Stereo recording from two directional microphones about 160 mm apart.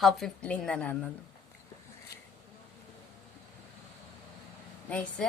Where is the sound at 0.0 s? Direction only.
5° left (ahead or behind).